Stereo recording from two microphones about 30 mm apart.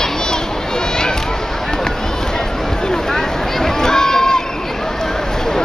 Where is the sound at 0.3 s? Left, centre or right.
Left.